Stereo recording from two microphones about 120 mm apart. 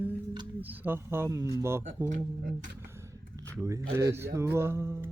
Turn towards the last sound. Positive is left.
turn(degrees=-20)  # may be behind; listen again after turning